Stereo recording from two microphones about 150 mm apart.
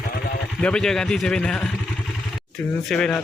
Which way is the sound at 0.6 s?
5° left (ahead or behind).